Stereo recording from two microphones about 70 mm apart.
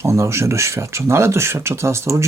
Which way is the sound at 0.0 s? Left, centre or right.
Right.